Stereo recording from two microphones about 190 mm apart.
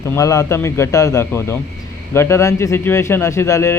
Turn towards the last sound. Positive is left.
turn(degrees=15)  # may be behind; listen again after turning